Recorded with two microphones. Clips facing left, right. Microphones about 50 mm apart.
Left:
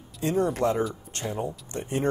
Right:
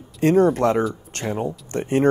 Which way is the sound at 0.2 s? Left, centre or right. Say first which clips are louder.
Right 8 dB; right.